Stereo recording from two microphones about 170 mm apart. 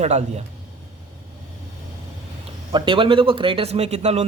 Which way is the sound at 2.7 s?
30° right (ahead or behind).